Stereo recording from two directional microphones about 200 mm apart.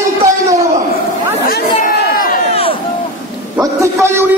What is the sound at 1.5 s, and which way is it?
Chatter, 50° left (ahead or behind).